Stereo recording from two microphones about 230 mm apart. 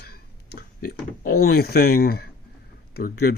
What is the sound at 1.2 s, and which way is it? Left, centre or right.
Speech, left.